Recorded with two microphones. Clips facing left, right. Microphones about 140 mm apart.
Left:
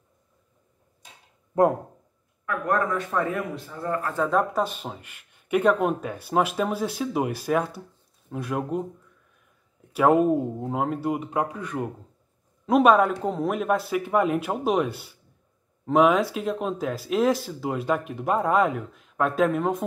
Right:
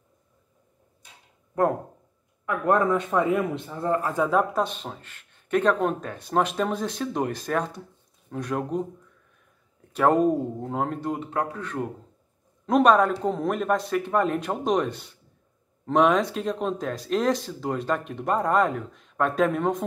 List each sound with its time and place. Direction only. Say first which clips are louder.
2.4 s a man's voice: right 3 dB; 20° right (ahead or behind)
4.3 s speech: even; centre (ahead or behind)
9.9 s speech: left 1 dB; 5° left (ahead or behind)